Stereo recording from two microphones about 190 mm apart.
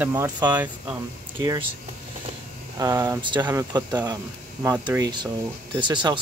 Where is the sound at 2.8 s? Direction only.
15° right (ahead or behind).